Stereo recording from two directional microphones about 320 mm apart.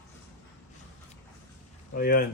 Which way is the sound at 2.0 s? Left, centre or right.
Left.